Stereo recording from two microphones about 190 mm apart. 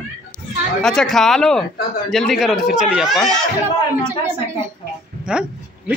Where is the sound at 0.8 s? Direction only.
Centre (ahead or behind).